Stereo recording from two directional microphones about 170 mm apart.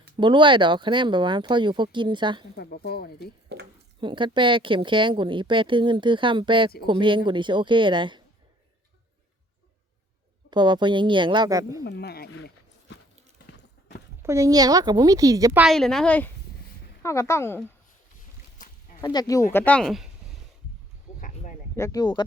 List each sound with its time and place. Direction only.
0.2 s speech: 30° right (ahead or behind)
2.6 s speech: 65° left (ahead or behind)
4.0 s speech: 30° right (ahead or behind)
10.5 s speech: 25° right (ahead or behind)
11.9 s speech: 70° left (ahead or behind)
14.2 s speech: 20° right (ahead or behind)
15.5 s a woman's voice: centre (ahead or behind)
19.0 s speech: 20° left (ahead or behind)
19.5 s a woman's voice: 10° left (ahead or behind)
21.2 s a sound: 50° left (ahead or behind)
21.8 s speech: 20° left (ahead or behind)